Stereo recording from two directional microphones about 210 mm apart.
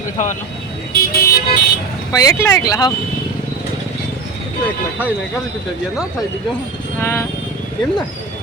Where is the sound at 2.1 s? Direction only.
15° left (ahead or behind).